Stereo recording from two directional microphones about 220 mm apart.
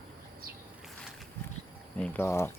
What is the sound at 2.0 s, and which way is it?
Speech, 5° left (ahead or behind).